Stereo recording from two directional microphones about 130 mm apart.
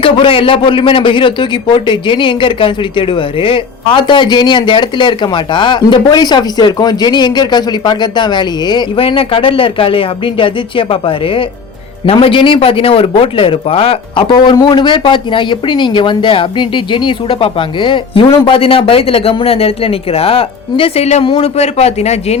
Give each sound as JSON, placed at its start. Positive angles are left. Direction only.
{"t": 0.0, "sound": "a man's voice", "side_deg": 40}